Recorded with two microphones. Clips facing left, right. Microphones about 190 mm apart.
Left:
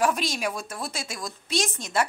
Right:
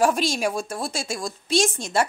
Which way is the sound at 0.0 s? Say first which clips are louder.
Right 4 dB; 30° right (ahead or behind).